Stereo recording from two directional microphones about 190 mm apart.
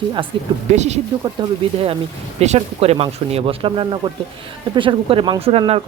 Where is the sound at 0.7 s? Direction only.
35° right (ahead or behind).